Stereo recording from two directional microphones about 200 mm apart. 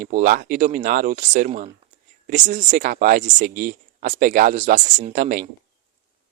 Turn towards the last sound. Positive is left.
turn(degrees=-40)  # may be behind; listen again after turning